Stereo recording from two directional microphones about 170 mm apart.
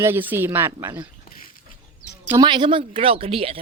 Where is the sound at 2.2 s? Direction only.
20° right (ahead or behind).